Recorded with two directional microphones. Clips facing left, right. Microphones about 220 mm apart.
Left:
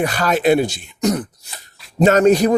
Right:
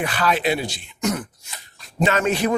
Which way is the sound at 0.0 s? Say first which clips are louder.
Left 5 dB; 40° left (ahead or behind).